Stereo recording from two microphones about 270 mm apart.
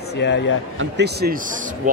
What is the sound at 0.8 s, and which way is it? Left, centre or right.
Speech, right.